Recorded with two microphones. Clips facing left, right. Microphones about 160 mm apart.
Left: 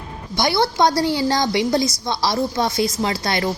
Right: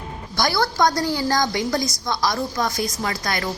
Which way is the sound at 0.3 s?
25° left (ahead or behind).